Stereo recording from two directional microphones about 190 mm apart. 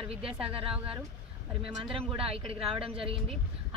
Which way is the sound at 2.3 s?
30° right (ahead or behind).